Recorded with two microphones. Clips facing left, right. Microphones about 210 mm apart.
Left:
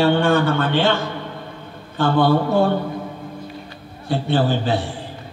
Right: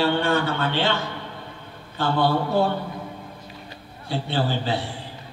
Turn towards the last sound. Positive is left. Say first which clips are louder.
# left 5 dB
turn(degrees=45)  # may be behind; listen again after turning